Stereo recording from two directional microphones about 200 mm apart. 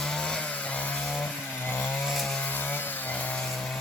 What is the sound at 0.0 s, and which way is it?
Chainsaw, 5° left (ahead or behind).